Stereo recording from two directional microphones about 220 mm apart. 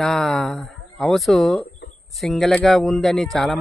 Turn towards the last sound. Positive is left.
turn(degrees=0)  # may be behind; listen again after turning